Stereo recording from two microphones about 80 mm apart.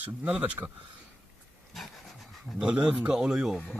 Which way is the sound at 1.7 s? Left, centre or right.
Centre.